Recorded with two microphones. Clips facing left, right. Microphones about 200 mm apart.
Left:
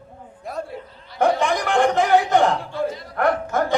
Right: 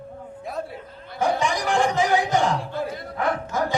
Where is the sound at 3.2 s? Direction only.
60° left (ahead or behind).